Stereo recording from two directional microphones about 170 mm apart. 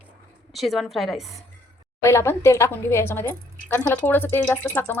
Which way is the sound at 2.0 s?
15° left (ahead or behind).